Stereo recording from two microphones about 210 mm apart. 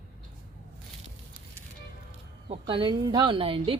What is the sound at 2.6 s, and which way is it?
A woman's voice, 25° right (ahead or behind).